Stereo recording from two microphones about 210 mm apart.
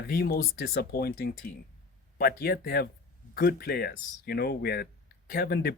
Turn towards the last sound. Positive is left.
turn(degrees=45)  # may be behind; listen again after turning